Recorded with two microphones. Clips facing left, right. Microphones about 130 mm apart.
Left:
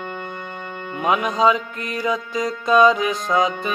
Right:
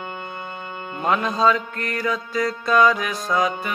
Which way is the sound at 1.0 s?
15° left (ahead or behind).